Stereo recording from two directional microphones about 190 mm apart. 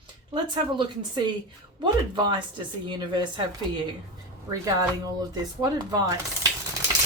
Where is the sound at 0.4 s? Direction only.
25° right (ahead or behind).